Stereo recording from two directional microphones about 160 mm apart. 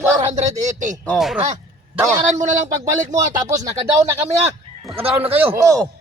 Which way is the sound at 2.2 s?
50° right (ahead or behind).